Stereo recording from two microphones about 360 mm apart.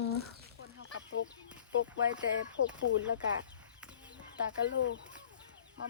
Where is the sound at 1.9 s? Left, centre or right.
Centre.